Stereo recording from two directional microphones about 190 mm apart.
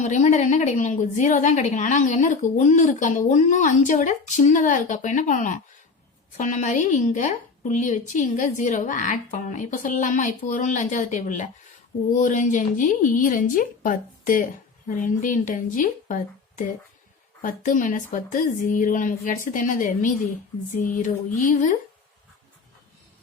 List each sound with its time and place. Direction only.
0.0 s a woman's voice: 40° left (ahead or behind)